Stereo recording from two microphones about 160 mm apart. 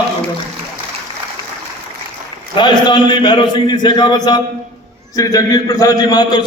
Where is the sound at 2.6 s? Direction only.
30° left (ahead or behind).